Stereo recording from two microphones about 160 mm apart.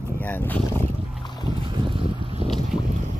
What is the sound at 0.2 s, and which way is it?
Speech, 10° left (ahead or behind).